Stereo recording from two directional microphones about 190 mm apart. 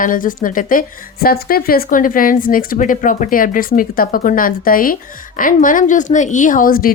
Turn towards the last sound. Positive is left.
turn(degrees=50)  # may be behind; listen again after turning